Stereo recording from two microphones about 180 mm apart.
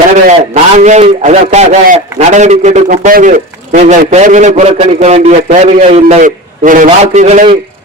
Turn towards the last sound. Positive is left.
turn(degrees=-40)  # may be behind; listen again after turning